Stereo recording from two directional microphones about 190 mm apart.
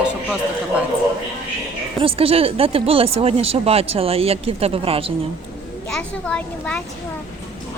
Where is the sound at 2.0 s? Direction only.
30° right (ahead or behind).